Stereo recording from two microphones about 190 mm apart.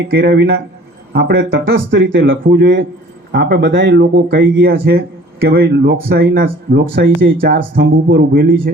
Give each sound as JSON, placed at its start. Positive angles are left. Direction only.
{"t": 0.1, "sound": "speech", "side_deg": -65}
{"t": 2.4, "sound": "speech", "side_deg": -60}
{"t": 4.6, "sound": "speech", "side_deg": -60}